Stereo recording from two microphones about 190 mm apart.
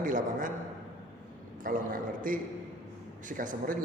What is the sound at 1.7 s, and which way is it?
A man's voice, 45° right (ahead or behind).